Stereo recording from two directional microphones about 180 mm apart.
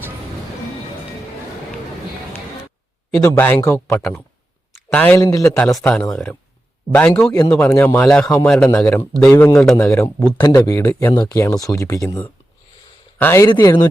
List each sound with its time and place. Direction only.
3.2 s speech: 15° left (ahead or behind)
5.4 s speech: 5° left (ahead or behind)
9.6 s speech: centre (ahead or behind)
9.9 s speech: 15° left (ahead or behind)